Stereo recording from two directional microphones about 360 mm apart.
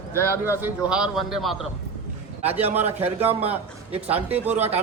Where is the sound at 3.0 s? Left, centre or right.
Centre.